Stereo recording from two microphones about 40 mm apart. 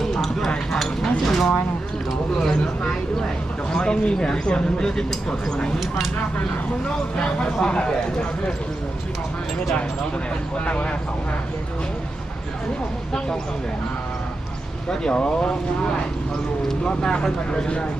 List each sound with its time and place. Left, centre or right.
0.0 s a sound: centre
0.7 s speech: centre
6.8 s speech: left
10.7 s speech: left
13.1 s speech: centre
14.8 s speech: left
16.9 s speech: left